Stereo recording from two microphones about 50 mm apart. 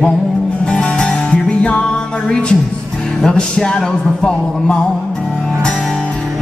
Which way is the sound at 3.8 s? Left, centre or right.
Centre.